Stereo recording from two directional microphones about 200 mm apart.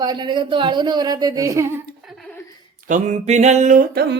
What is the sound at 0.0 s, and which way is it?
Speech, 20° right (ahead or behind).